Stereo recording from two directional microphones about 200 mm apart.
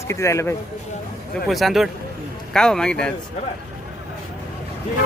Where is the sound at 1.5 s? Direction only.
Centre (ahead or behind).